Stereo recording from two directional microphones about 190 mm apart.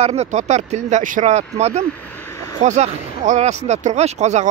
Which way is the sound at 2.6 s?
40° right (ahead or behind).